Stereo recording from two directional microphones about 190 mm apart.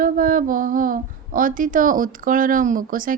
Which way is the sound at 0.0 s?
45° right (ahead or behind).